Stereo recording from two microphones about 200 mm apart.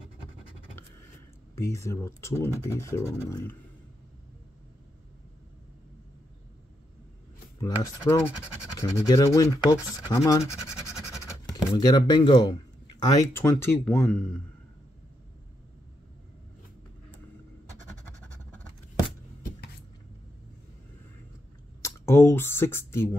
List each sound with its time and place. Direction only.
1.5 s speech: 15° left (ahead or behind)
8.1 s speech: 10° left (ahead or behind)
11.5 s speech: 20° left (ahead or behind)
21.8 s speech: 10° left (ahead or behind)